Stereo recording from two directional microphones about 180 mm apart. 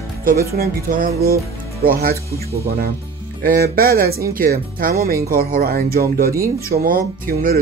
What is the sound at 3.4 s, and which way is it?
Speech, 55° right (ahead or behind).